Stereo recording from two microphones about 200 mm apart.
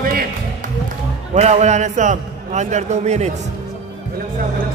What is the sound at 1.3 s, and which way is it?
A man's voice, 35° right (ahead or behind).